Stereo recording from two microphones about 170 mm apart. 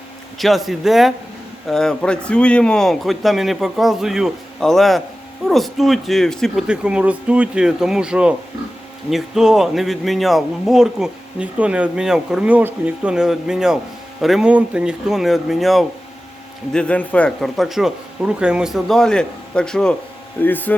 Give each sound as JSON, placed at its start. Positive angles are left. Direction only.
{"t": 0.3, "sound": "speech", "side_deg": 0}